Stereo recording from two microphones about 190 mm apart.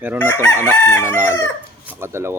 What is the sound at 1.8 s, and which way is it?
Speech, 15° right (ahead or behind).